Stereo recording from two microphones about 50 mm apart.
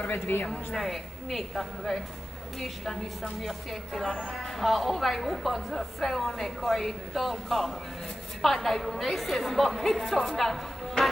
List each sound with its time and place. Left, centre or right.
0.1 s speech: left
0.7 s a woman's voice: centre